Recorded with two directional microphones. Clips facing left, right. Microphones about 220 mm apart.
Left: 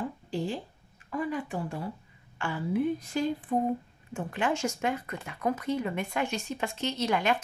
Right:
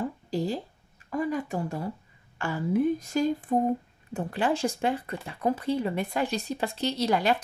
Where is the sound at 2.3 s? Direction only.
40° right (ahead or behind).